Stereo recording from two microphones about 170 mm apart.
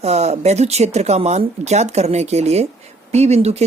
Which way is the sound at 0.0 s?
40° right (ahead or behind).